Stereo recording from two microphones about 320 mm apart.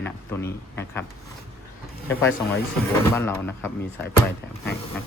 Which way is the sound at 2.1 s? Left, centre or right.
Left.